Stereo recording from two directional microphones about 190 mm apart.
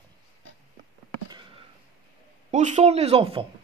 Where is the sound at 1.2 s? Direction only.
25° right (ahead or behind).